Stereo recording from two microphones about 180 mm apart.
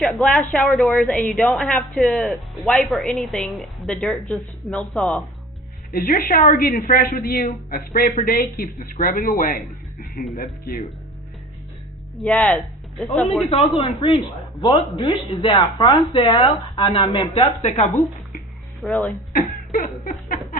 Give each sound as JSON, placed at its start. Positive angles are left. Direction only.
{"t": 0.0, "sound": "speech", "side_deg": 5}
{"t": 5.9, "sound": "a woman's voice", "side_deg": 55}
{"t": 12.2, "sound": "speech", "side_deg": 5}
{"t": 13.5, "sound": "speech", "side_deg": 30}
{"t": 17.7, "sound": "speech", "side_deg": 40}
{"t": 18.8, "sound": "speech", "side_deg": 10}
{"t": 19.4, "sound": "a sound", "side_deg": 50}